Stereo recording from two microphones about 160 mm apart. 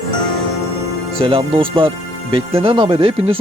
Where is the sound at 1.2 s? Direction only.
35° right (ahead or behind).